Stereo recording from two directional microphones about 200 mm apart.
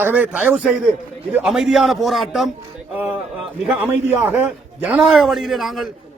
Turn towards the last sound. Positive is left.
turn(degrees=0)  # may be behind; listen again after turning